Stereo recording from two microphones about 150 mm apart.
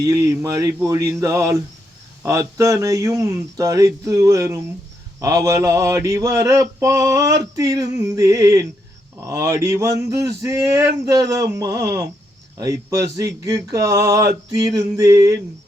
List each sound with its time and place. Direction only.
0.0 s mantra: 20° right (ahead or behind)